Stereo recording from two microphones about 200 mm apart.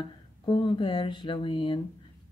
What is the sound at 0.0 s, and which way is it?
Speech, 25° left (ahead or behind).